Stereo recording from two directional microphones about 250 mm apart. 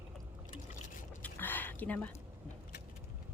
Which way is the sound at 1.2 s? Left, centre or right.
Centre.